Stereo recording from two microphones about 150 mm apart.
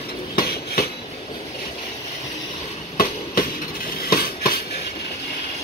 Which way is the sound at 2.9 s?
65° left (ahead or behind).